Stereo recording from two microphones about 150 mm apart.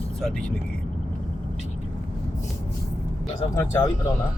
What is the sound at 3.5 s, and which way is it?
Speech, 20° left (ahead or behind).